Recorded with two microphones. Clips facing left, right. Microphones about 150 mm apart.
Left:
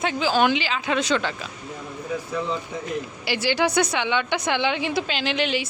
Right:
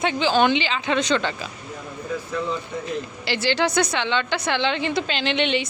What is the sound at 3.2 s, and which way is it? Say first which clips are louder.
A woman's voice: even; 10° left (ahead or behind).